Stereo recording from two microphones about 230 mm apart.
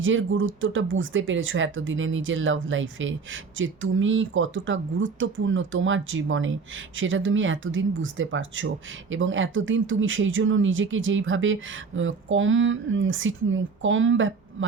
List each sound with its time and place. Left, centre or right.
0.0 s speech: right